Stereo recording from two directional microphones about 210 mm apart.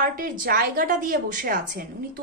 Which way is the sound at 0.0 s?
40° right (ahead or behind).